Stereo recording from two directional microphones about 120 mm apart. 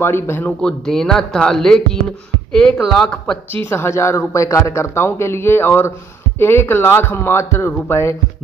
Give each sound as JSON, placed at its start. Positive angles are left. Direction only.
{"t": 0.0, "sound": "speech", "side_deg": 15}
{"t": 0.5, "sound": "speech", "side_deg": 5}
{"t": 3.6, "sound": "a man's voice", "side_deg": 20}